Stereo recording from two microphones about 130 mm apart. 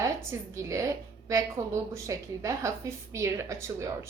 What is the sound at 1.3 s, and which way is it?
A woman's voice, 25° right (ahead or behind).